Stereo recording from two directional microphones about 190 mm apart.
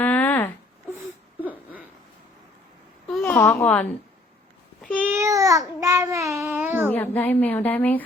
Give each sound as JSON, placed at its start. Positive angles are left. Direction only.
{"t": 0.0, "sound": "a sound", "side_deg": 10}
{"t": 3.1, "sound": "a child's voice", "side_deg": 5}
{"t": 4.9, "sound": "child singing", "side_deg": -10}
{"t": 6.4, "sound": "babbling", "side_deg": -10}
{"t": 6.9, "sound": "a woman's voice", "side_deg": 10}